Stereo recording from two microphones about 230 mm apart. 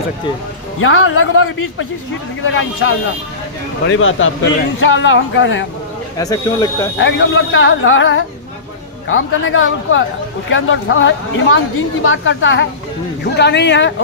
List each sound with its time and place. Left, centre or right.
0.7 s a woman's voice: left
6.1 s speech: centre
7.0 s a woman's voice: left